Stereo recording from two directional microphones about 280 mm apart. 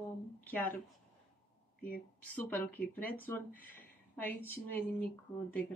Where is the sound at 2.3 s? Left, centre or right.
Centre.